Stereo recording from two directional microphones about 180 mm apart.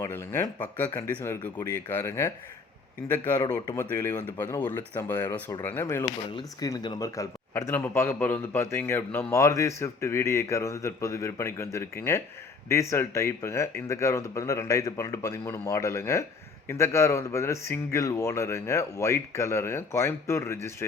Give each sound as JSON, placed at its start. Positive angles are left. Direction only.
{"t": 0.0, "sound": "speech", "side_deg": 15}